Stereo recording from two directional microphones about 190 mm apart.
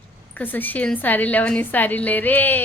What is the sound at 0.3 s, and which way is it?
A woman's voice, 10° left (ahead or behind).